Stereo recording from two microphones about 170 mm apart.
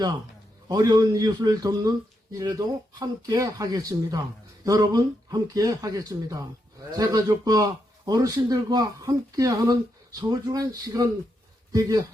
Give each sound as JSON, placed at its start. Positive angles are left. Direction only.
{"t": 0.7, "sound": "a man's voice", "side_deg": -20}